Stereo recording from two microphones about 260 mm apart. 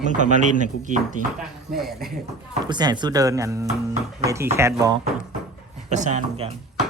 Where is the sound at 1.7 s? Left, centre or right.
Centre.